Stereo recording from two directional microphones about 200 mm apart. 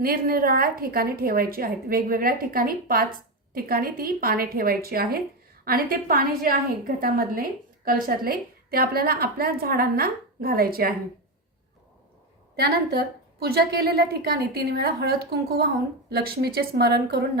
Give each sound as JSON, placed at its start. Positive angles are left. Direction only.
{"t": 0.0, "sound": "a woman's voice", "side_deg": -45}
{"t": 12.5, "sound": "a woman's voice", "side_deg": -50}